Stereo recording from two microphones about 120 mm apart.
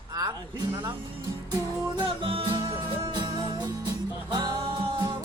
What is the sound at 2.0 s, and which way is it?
Music, 50° right (ahead or behind).